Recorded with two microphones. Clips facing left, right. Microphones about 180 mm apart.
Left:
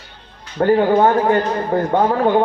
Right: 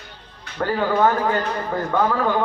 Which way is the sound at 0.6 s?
30° left (ahead or behind).